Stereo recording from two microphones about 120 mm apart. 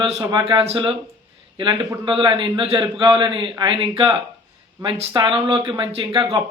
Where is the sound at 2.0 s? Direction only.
45° right (ahead or behind).